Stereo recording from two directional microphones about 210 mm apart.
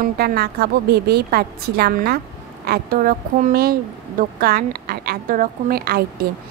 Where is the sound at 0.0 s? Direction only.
45° right (ahead or behind).